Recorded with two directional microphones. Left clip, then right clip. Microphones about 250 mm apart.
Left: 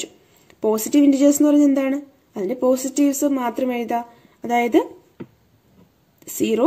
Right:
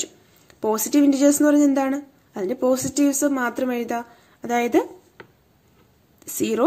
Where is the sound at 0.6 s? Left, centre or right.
Centre.